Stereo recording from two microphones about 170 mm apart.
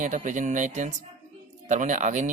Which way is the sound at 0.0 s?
45° right (ahead or behind).